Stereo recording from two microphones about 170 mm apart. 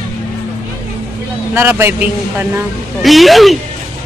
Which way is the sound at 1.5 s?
10° right (ahead or behind).